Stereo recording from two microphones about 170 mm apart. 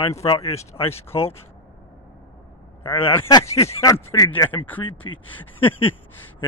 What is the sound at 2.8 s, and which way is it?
Speech, 35° left (ahead or behind).